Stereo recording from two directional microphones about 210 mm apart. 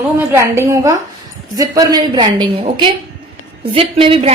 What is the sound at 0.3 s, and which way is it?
A woman's voice, 10° right (ahead or behind).